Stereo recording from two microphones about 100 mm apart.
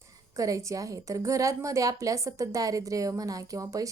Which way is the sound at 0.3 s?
35° right (ahead or behind).